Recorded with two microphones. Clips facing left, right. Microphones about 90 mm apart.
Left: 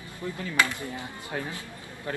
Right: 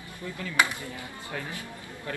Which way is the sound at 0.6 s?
15° right (ahead or behind).